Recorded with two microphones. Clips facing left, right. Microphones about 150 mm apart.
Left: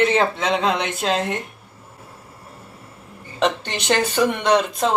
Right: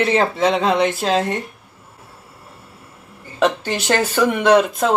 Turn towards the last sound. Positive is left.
turn(degrees=-5)  # may be behind; listen again after turning